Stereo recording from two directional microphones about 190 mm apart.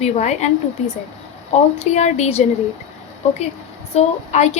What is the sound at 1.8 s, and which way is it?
Speech, 35° left (ahead or behind).